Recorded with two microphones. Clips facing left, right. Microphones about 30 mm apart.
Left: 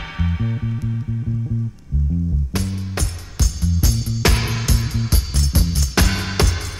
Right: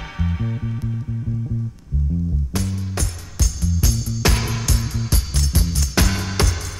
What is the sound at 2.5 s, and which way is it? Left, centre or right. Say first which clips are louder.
Music: left 1 dB; left.